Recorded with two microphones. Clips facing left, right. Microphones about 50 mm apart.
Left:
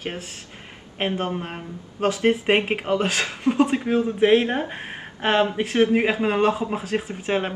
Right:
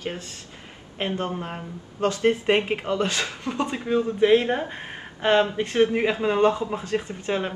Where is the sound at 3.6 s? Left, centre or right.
Centre.